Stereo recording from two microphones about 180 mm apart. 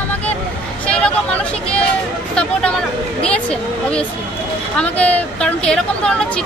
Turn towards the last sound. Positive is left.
turn(degrees=5)  # may be behind; listen again after turning